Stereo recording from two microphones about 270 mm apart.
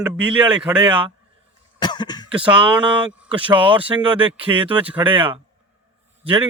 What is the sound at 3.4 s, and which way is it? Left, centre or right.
Speech, centre.